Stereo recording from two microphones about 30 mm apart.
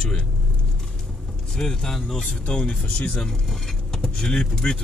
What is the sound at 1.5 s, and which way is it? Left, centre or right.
Speech, left.